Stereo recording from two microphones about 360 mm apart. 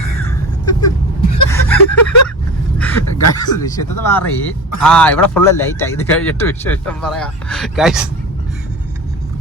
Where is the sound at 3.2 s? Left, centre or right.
Left.